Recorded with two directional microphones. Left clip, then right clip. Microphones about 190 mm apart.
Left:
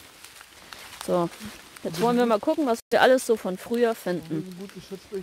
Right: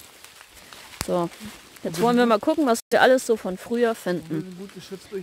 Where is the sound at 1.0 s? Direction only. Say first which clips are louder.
Even; 5° right (ahead or behind).